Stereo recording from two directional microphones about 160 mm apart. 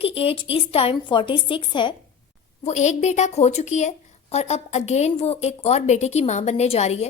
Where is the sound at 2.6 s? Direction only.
45° left (ahead or behind).